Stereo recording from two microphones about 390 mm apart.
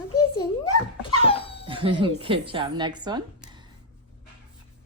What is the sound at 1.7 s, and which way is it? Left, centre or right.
Speech, centre.